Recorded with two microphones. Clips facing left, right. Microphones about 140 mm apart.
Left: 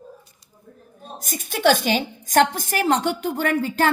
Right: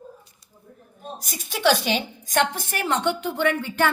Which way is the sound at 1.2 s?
50° left (ahead or behind).